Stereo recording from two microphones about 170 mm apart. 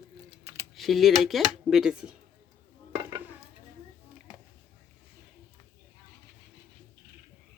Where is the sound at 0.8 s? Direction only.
Centre (ahead or behind).